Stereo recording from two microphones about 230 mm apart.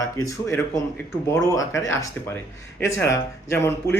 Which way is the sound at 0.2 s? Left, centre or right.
Centre.